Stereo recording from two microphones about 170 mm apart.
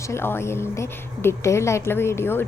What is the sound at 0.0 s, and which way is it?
A woman's voice, 15° left (ahead or behind).